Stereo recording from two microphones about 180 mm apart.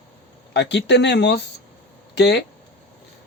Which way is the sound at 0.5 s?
70° left (ahead or behind).